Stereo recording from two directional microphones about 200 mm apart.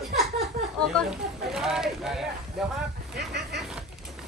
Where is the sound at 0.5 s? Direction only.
40° right (ahead or behind).